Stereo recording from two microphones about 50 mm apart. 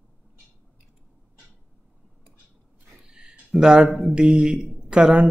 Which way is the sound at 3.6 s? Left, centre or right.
Centre.